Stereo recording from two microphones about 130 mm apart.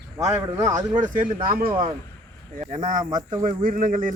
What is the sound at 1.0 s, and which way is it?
Speech, 90° right.